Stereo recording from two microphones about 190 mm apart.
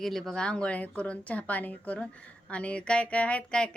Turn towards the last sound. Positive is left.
turn(degrees=5)  # may be behind; listen again after turning